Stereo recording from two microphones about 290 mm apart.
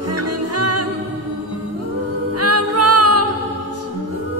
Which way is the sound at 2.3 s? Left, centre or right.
Right.